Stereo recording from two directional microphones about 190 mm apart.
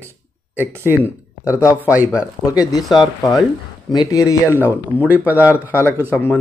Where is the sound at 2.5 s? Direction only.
20° left (ahead or behind).